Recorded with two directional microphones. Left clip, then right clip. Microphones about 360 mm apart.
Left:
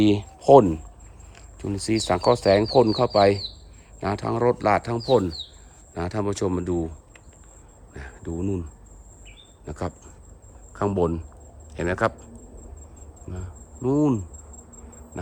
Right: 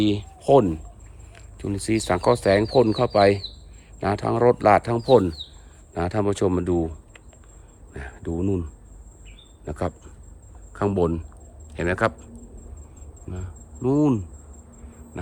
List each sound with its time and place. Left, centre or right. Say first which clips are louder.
0.0 s speech: left 3 dB; centre